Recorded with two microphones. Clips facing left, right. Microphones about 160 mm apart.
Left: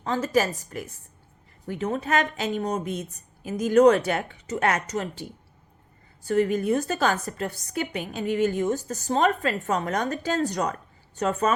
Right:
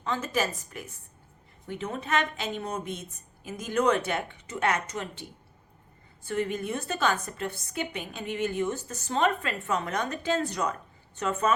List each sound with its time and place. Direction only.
0.0 s a woman's voice: 40° left (ahead or behind)
6.2 s a woman's voice: 40° left (ahead or behind)